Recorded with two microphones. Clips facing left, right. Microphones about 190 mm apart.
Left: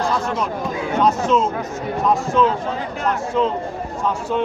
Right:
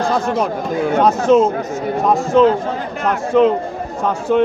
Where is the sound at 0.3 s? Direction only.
50° right (ahead or behind).